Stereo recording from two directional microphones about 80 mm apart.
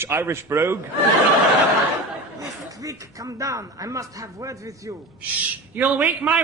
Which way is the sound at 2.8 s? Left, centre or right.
Right.